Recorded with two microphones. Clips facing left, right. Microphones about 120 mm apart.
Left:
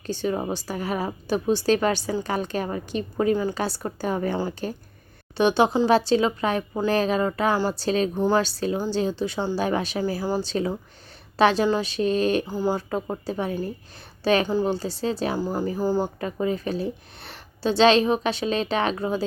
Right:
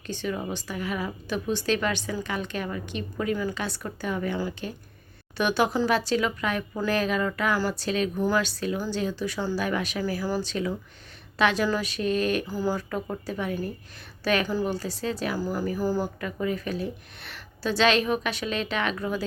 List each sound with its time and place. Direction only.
0.1 s a woman's voice: 35° left (ahead or behind)